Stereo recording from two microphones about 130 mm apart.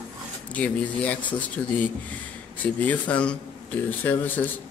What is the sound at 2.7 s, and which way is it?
A man's voice, 10° left (ahead or behind).